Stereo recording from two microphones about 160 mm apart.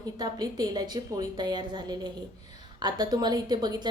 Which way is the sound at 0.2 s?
25° right (ahead or behind).